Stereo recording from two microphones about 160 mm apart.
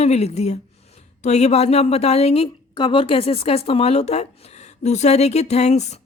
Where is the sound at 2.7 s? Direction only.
30° left (ahead or behind).